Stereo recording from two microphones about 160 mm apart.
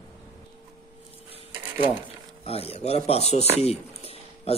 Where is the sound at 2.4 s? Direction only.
40° left (ahead or behind).